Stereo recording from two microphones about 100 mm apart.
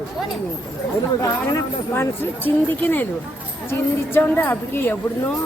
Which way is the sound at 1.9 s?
25° left (ahead or behind).